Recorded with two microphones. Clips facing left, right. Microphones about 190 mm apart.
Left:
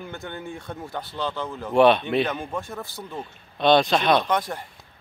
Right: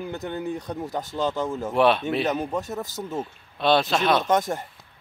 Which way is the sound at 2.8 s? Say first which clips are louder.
Right 5 dB; 40° right (ahead or behind).